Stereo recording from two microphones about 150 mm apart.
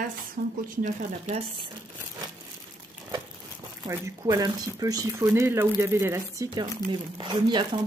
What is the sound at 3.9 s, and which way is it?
Speech, 20° right (ahead or behind).